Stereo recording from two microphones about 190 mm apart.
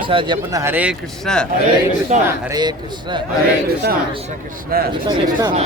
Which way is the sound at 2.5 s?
20° right (ahead or behind).